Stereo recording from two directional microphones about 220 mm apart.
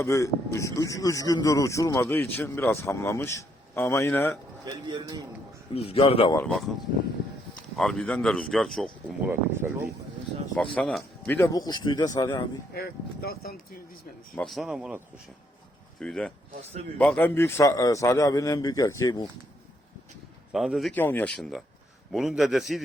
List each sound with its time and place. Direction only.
0.0 s speech: 15° left (ahead or behind)
4.6 s speech: 20° right (ahead or behind)
5.7 s speech: 25° left (ahead or behind)
6.3 s speech: 5° left (ahead or behind)
7.8 s speech: 5° left (ahead or behind)
9.6 s speech: 10° right (ahead or behind)
10.8 s speech: 5° left (ahead or behind)
12.7 s speech: 45° left (ahead or behind)
14.3 s speech: centre (ahead or behind); by 19.3 s 15° left (ahead or behind)
20.5 s speech: centre (ahead or behind)